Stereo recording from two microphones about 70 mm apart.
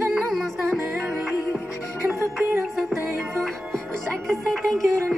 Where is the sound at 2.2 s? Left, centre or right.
Right.